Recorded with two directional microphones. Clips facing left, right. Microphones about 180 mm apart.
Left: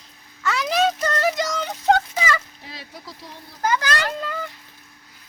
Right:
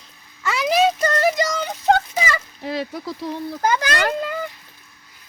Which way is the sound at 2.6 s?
60° right (ahead or behind).